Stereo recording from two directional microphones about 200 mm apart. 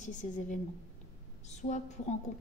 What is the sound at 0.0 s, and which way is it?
Speech, 40° left (ahead or behind).